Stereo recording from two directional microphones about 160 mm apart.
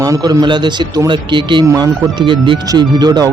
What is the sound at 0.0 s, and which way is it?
A man's voice, 20° right (ahead or behind).